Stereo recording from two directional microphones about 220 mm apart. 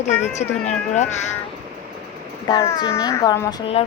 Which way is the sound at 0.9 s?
30° left (ahead or behind).